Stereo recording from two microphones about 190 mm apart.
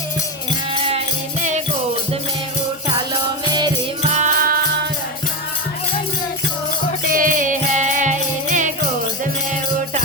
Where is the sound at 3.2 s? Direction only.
25° right (ahead or behind).